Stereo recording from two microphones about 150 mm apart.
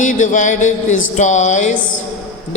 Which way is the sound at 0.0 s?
60° left (ahead or behind).